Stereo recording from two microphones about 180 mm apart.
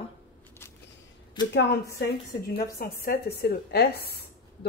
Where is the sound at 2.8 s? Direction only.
60° left (ahead or behind).